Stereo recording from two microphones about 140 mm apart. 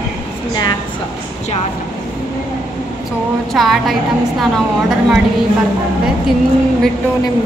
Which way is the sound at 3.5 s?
Centre (ahead or behind).